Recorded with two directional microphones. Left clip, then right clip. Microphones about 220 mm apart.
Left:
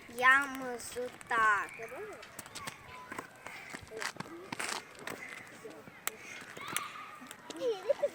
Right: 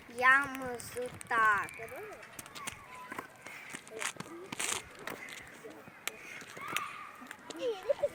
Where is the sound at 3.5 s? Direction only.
15° left (ahead or behind).